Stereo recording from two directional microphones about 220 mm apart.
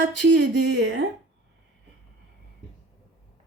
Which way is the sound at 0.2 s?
55° right (ahead or behind).